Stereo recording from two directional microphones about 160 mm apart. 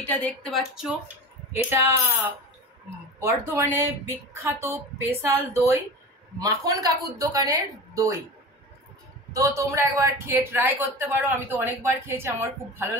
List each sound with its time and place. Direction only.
0.0 s speech: 10° left (ahead or behind)
0.6 s speech: 5° right (ahead or behind)
3.2 s a man's voice: 15° right (ahead or behind)
9.3 s a man's voice: 20° right (ahead or behind)